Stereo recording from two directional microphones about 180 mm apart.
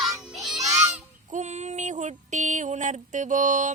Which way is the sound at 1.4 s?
40° right (ahead or behind).